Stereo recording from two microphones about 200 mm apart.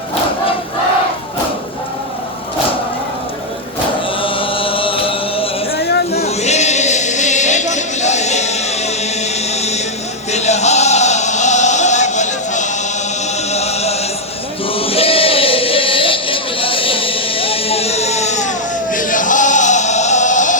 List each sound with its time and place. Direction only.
4.2 s chant: 25° left (ahead or behind)
5.7 s a sound: 55° left (ahead or behind)
6.1 s choir: 35° left (ahead or behind)
9.6 s a sound: 35° left (ahead or behind)
10.3 s music: 35° left (ahead or behind)
13.5 s chant: 30° left (ahead or behind)